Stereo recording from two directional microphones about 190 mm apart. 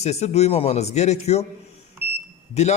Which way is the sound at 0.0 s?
35° left (ahead or behind).